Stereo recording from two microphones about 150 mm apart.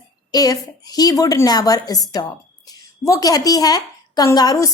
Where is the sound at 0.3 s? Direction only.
25° left (ahead or behind).